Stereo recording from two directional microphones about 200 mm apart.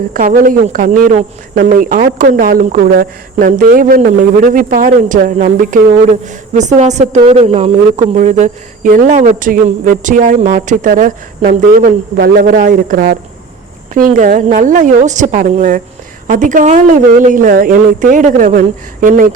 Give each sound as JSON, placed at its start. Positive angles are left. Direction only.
{"t": 0.1, "sound": "speech", "side_deg": -45}